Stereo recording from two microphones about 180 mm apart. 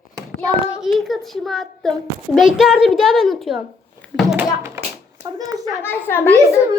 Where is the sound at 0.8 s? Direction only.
Centre (ahead or behind).